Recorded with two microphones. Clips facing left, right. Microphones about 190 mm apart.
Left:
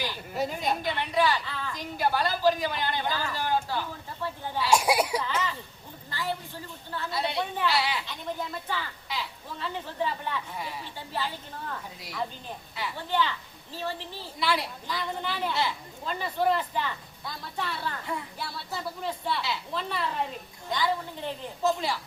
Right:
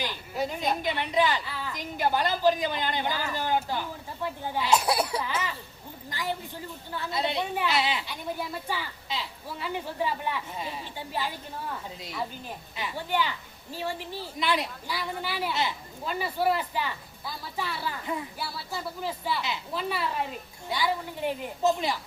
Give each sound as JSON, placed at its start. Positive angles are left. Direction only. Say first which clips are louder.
{"t": 0.3, "sound": "speech", "louder": "even", "side_deg": 0}
{"t": 0.7, "sound": "a woman's voice", "louder": "right 1 dB", "side_deg": -20}
{"t": 1.8, "sound": "a woman's voice", "louder": "right 1 dB", "side_deg": -20}
{"t": 4.7, "sound": "speech", "louder": "left 2 dB", "side_deg": 10}
{"t": 5.2, "sound": "a woman's voice", "louder": "left 1 dB", "side_deg": -10}
{"t": 8.0, "sound": "a woman's voice", "louder": "right 1 dB", "side_deg": -10}
{"t": 12.7, "sound": "a woman's voice", "louder": "even", "side_deg": -15}
{"t": 14.3, "sound": "a woman's voice", "louder": "even", "side_deg": -20}
{"t": 14.8, "sound": "a woman's voice", "louder": "left 1 dB", "side_deg": -10}